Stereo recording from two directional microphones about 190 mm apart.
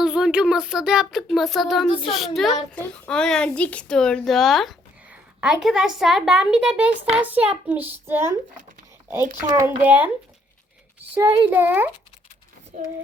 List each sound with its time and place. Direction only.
0.0 s a woman's voice: 5° right (ahead or behind)
9.6 s a child's voice: 10° right (ahead or behind)
11.1 s a child's voice: 10° right (ahead or behind)